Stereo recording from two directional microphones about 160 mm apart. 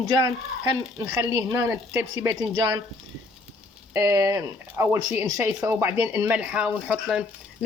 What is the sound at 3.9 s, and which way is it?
Speech, 15° right (ahead or behind).